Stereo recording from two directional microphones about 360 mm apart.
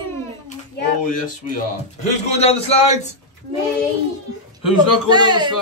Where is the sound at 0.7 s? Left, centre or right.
Left.